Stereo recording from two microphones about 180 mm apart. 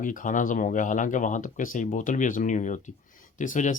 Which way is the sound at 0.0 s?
45° left (ahead or behind).